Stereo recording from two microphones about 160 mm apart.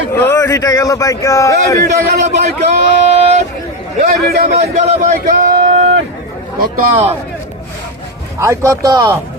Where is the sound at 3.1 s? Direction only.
40° right (ahead or behind).